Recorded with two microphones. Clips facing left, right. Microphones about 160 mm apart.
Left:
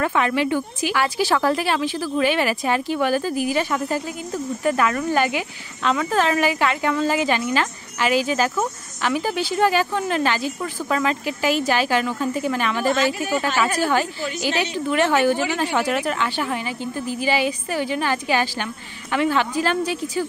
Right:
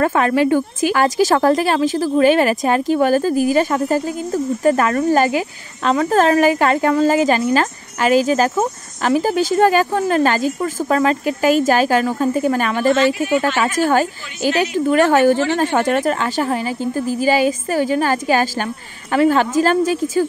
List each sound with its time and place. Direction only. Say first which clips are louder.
0.0 s a woman's voice: right 5 dB; 45° right (ahead or behind)